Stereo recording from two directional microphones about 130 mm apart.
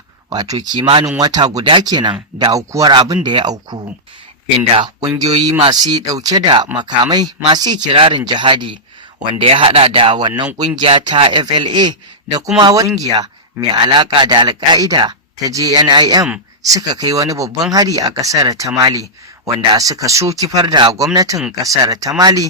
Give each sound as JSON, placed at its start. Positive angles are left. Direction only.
{"t": 0.3, "sound": "speech", "side_deg": -30}
{"t": 4.8, "sound": "speech", "side_deg": -35}
{"t": 7.9, "sound": "speech", "side_deg": -40}